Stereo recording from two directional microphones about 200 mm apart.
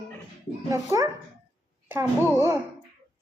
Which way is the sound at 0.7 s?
15° right (ahead or behind).